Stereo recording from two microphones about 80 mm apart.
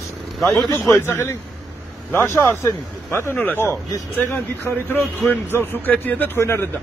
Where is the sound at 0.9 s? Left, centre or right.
Left.